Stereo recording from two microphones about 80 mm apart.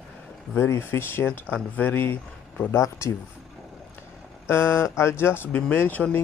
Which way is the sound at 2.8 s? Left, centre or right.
Left.